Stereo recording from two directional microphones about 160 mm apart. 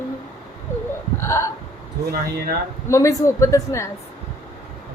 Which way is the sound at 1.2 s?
20° left (ahead or behind).